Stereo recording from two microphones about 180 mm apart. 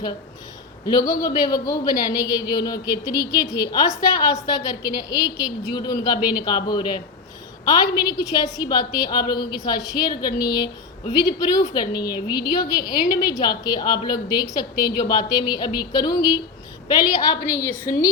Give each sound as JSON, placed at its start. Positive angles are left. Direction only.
{"t": 0.9, "sound": "a man's voice", "side_deg": 20}